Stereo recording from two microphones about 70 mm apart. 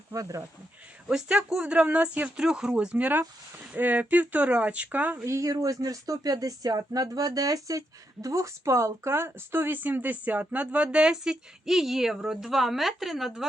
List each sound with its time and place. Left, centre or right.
0.1 s speech: right
1.0 s speech: centre
5.1 s speech: right; by 10.8 s centre
10.9 s speech: centre